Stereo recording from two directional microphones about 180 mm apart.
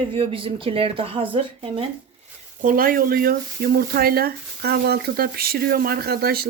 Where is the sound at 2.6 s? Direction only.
50° right (ahead or behind).